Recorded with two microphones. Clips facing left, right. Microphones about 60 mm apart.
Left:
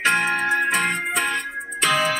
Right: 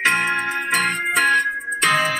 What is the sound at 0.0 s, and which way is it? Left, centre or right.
Music, right.